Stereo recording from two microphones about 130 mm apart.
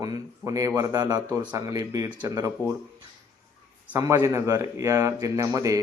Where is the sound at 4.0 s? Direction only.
25° right (ahead or behind).